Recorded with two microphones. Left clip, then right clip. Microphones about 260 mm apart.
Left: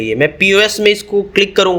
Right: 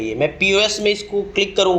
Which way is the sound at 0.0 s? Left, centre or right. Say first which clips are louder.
Left 6 dB; left.